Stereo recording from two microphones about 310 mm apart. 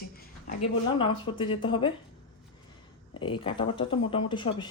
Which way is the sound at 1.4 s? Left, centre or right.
Centre.